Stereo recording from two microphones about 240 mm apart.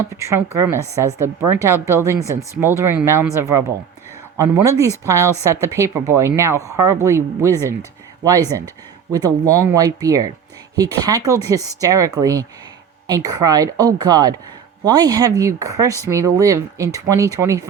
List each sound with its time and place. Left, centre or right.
0.1 s speech: centre